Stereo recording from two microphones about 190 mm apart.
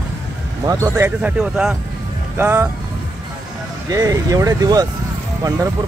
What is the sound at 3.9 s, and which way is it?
Speech, 20° right (ahead or behind).